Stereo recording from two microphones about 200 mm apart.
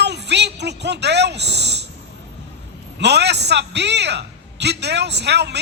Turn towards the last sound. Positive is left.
turn(degrees=-55)  # may be behind; listen again after turning